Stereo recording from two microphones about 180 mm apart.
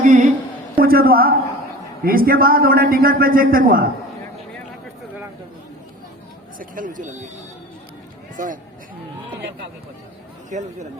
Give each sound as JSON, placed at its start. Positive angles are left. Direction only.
{"t": 0.0, "sound": "a sound", "side_deg": -45}
{"t": 0.8, "sound": "a man's voice", "side_deg": -55}
{"t": 6.6, "sound": "a man's voice", "side_deg": -50}
{"t": 10.5, "sound": "speech", "side_deg": -40}